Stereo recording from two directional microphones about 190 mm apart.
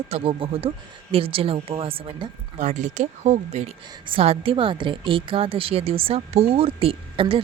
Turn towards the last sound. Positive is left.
turn(degrees=-30)  # may be behind; listen again after turning